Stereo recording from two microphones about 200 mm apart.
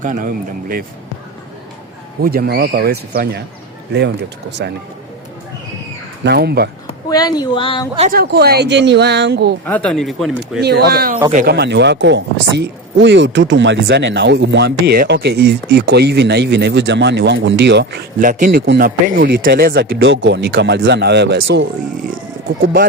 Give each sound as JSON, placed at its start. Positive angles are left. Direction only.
{"t": 0.0, "sound": "speech", "side_deg": -40}
{"t": 2.2, "sound": "speech", "side_deg": -50}
{"t": 4.6, "sound": "speech", "side_deg": -55}
{"t": 6.2, "sound": "speech", "side_deg": -55}
{"t": 7.1, "sound": "speech", "side_deg": 20}
{"t": 8.1, "sound": "speech", "side_deg": -50}
{"t": 9.6, "sound": "speech", "side_deg": 5}
{"t": 10.6, "sound": "speech", "side_deg": -55}
{"t": 18.2, "sound": "speech", "side_deg": -45}
{"t": 18.6, "sound": "speech", "side_deg": -55}